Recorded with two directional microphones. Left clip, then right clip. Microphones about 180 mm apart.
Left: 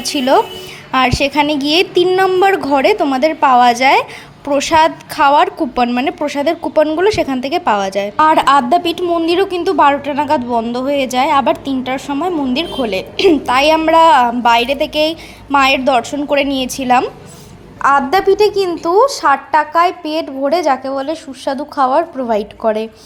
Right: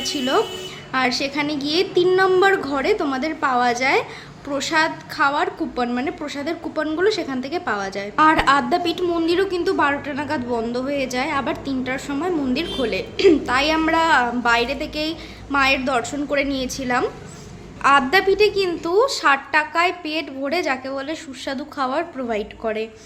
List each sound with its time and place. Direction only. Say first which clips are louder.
0.0 s a woman's voice: left 8 dB; 45° left (ahead or behind)